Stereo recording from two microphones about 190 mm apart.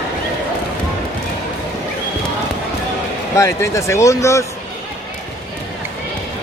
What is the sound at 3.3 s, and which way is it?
Speech, 15° left (ahead or behind).